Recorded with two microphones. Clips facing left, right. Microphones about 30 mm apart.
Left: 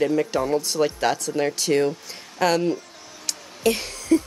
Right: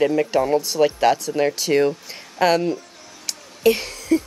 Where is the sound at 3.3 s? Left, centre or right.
Centre.